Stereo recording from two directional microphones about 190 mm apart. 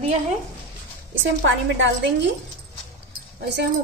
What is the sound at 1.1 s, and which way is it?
A woman's voice, 80° right.